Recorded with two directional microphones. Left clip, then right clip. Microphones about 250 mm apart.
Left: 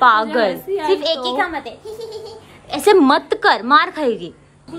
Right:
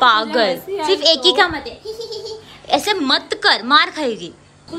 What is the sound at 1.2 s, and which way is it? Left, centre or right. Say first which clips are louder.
Speech: right 6 dB; right.